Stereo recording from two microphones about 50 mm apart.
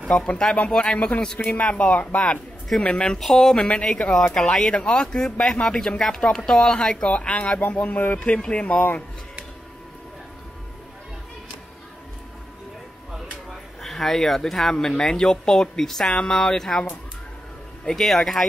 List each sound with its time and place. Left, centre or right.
0.1 s speech: left
0.9 s speech: left
3.2 s speech: centre; by 8.2 s left
8.3 s speech: left
13.8 s speech: centre
17.8 s speech: centre